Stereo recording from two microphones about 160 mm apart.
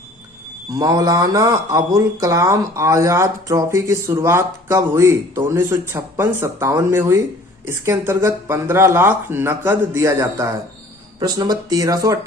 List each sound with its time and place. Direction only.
0.7 s speech: 25° right (ahead or behind)